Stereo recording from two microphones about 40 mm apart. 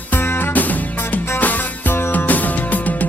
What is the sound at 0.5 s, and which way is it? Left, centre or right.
Music, left.